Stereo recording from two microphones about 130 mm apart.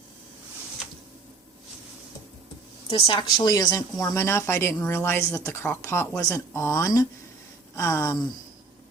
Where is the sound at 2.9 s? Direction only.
45° left (ahead or behind); by 8.1 s 25° left (ahead or behind).